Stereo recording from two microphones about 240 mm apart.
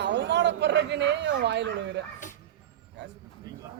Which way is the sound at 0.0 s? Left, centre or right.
Right.